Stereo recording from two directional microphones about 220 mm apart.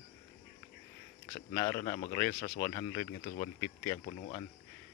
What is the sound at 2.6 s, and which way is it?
Speech, 15° left (ahead or behind).